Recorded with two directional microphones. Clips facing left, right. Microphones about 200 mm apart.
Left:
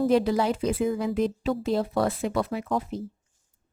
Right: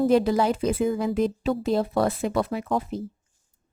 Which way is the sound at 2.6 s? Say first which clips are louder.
Right 2 dB; 55° right (ahead or behind).